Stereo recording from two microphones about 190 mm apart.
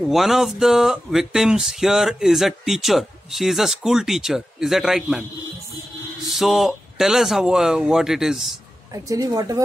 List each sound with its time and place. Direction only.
0.0 s speech: centre (ahead or behind)
6.3 s speech: centre (ahead or behind)
8.9 s a woman's voice: 15° right (ahead or behind)